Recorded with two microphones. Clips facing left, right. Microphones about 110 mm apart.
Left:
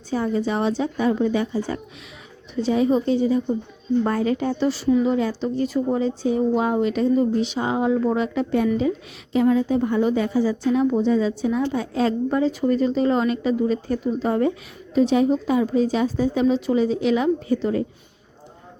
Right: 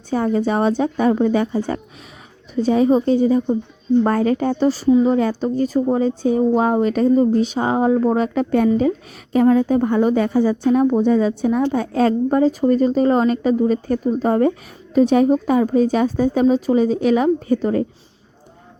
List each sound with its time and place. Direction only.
0.1 s a woman's voice: 50° right (ahead or behind)
2.6 s a woman's voice: 45° right (ahead or behind)